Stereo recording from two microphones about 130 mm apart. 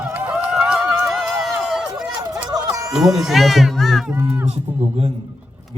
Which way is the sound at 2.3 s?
5° right (ahead or behind).